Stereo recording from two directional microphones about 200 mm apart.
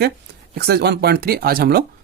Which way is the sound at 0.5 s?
55° right (ahead or behind).